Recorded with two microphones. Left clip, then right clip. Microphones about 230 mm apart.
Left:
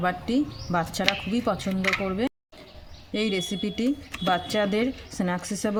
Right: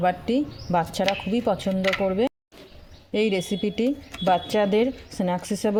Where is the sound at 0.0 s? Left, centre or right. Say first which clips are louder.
Right 3 dB; centre.